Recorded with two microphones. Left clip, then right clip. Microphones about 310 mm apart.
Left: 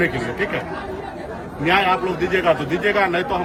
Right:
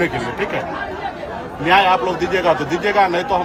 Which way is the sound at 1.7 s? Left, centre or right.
Centre.